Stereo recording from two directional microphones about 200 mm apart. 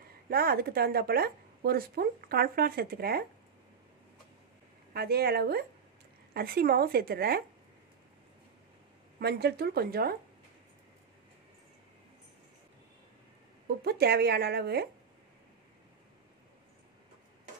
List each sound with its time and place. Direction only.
0.3 s speech: 50° right (ahead or behind)
4.9 s speech: 50° right (ahead or behind)
9.2 s speech: 55° right (ahead or behind)
13.8 s speech: 55° right (ahead or behind)